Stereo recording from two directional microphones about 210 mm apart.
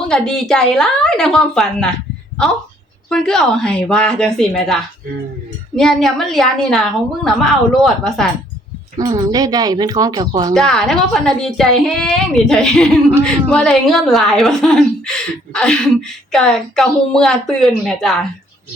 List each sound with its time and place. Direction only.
0.1 s a woman's voice: 5° left (ahead or behind)
3.1 s a woman's voice: 5° left (ahead or behind)
9.0 s a woman's voice: 15° right (ahead or behind)
10.5 s a woman's voice: centre (ahead or behind)